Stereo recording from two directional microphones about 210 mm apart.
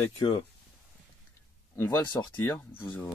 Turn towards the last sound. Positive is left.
turn(degrees=15)  # may be behind; listen again after turning